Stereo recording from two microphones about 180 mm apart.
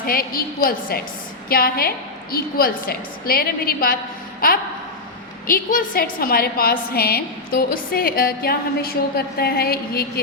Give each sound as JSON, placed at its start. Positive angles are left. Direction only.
{"t": 0.0, "sound": "a woman's voice", "side_deg": 55}
{"t": 4.4, "sound": "a sound", "side_deg": 55}
{"t": 5.5, "sound": "a woman's voice", "side_deg": 50}